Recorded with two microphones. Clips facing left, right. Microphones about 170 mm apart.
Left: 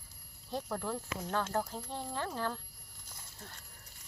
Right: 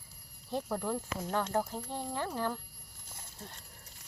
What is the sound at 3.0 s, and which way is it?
Horse, 25° right (ahead or behind).